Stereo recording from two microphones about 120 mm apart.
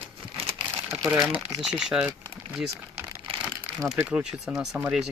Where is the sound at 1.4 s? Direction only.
5° right (ahead or behind).